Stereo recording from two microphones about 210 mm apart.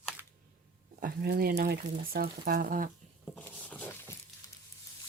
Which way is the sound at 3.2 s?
5° left (ahead or behind).